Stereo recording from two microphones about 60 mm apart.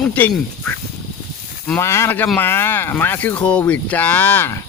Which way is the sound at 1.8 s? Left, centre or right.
Left.